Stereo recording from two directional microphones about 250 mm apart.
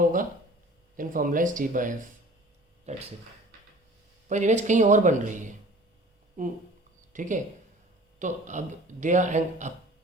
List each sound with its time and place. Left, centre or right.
0.9 s speech: right
4.3 s speech: right